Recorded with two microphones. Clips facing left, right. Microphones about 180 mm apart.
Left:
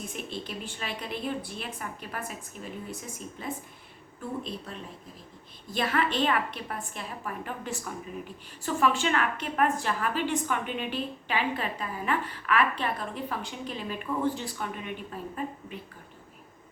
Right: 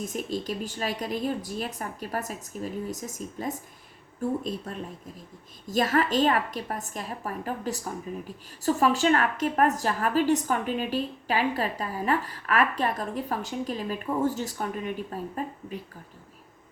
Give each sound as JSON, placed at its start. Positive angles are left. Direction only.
{"t": 0.0, "sound": "a woman's voice", "side_deg": -40}